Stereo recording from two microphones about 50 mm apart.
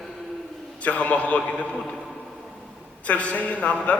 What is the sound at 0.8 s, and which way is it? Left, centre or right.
A man's voice, left.